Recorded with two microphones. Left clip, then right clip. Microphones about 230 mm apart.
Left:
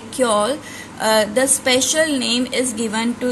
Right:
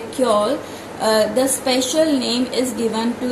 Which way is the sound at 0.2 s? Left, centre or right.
Left.